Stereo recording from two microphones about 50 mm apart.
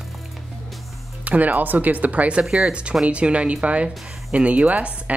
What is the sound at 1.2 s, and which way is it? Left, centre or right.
Speech, right.